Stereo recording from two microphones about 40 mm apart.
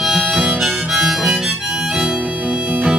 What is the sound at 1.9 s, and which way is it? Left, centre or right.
Harmonica, right.